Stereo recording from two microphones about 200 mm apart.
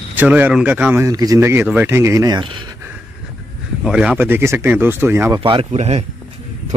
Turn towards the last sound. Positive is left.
turn(degrees=-30)  # may be behind; listen again after turning